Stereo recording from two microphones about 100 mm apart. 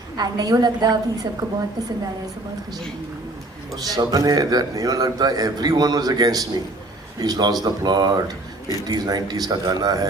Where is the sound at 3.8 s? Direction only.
40° right (ahead or behind).